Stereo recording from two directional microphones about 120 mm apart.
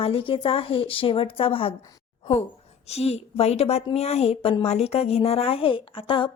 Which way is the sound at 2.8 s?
60° left (ahead or behind).